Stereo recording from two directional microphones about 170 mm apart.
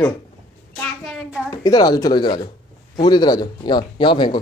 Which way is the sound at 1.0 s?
Centre (ahead or behind).